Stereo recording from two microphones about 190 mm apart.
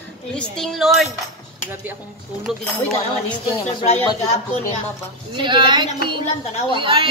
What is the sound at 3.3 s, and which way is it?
Speech, 25° left (ahead or behind).